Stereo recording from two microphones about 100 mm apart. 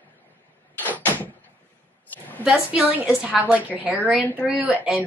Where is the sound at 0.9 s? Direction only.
20° left (ahead or behind).